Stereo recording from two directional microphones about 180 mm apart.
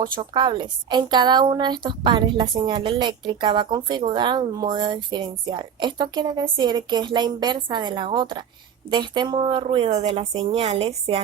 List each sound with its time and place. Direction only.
0.0 s a woman's voice: 25° right (ahead or behind)